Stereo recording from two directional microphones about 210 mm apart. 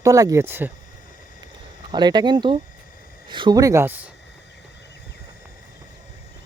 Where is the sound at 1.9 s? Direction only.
20° right (ahead or behind).